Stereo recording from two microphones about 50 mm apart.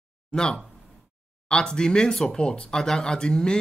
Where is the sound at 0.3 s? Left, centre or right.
Centre.